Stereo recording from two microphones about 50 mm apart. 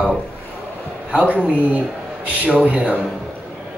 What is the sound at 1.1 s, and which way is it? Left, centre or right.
Speech, right.